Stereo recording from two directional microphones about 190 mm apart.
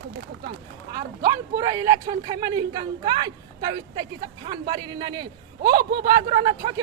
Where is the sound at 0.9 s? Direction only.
20° right (ahead or behind).